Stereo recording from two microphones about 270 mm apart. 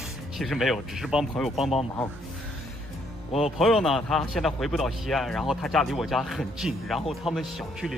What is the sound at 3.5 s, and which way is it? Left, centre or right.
Speech, centre.